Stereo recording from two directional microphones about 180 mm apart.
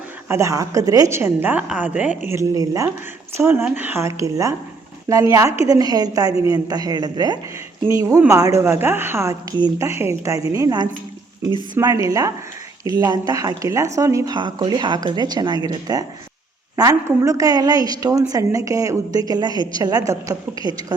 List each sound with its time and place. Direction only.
0.3 s a woman's voice: 15° right (ahead or behind)